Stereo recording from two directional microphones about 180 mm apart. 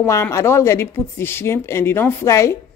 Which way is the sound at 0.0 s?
15° left (ahead or behind).